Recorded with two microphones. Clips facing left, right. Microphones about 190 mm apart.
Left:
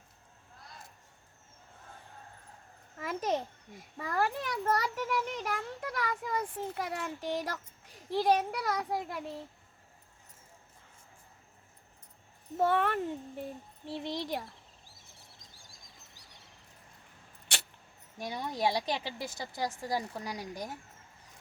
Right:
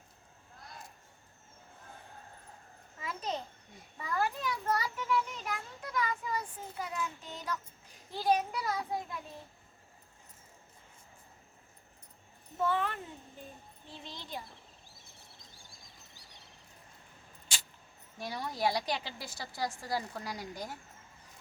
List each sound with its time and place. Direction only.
3.0 s babbling: 50° left (ahead or behind)
4.0 s a child's voice: 60° left (ahead or behind); by 7.6 s 85° left
8.1 s a child's voice: 70° left (ahead or behind)
12.6 s a child's voice: 60° left (ahead or behind)
13.8 s a child's voice: 70° left (ahead or behind)
18.2 s a woman's voice: 20° left (ahead or behind)